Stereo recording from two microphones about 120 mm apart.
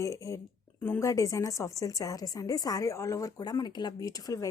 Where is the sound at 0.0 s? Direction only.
25° left (ahead or behind).